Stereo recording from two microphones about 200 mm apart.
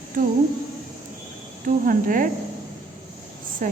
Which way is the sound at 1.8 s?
40° right (ahead or behind).